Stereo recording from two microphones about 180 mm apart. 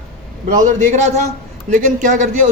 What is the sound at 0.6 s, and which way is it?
Speech, 40° right (ahead or behind).